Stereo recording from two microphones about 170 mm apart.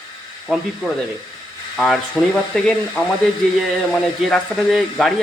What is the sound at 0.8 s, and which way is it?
Speech, centre (ahead or behind).